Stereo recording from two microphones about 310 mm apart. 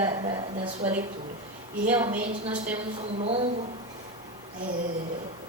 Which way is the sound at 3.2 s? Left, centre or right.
Centre.